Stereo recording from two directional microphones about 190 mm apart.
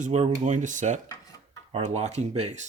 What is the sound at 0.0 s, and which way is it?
Speech, 40° right (ahead or behind).